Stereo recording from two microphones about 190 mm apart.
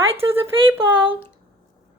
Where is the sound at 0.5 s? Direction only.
25° right (ahead or behind).